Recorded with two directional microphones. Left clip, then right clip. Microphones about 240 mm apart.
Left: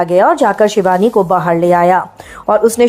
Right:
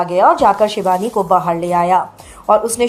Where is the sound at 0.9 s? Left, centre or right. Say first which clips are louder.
Left 3 dB; left.